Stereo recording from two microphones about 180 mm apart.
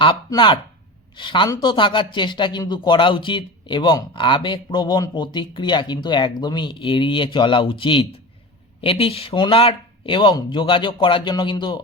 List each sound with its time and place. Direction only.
0.0 s speech: 25° left (ahead or behind)